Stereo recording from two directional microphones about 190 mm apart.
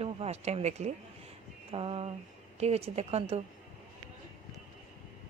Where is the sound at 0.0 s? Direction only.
35° right (ahead or behind).